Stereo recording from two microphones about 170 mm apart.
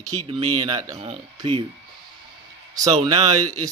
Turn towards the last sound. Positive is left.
turn(degrees=-20)  # may be behind; listen again after turning